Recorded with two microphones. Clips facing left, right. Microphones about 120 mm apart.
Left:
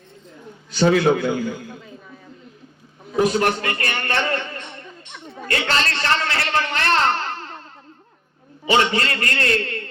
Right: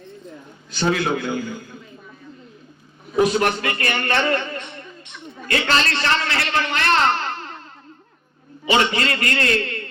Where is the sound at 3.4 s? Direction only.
35° left (ahead or behind).